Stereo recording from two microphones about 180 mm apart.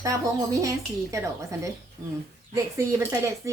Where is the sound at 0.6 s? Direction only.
15° right (ahead or behind).